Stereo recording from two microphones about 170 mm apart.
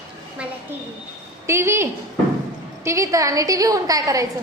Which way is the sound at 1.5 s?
15° right (ahead or behind).